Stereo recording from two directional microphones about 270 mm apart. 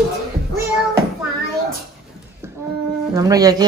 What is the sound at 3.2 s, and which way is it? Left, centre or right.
Speech, centre.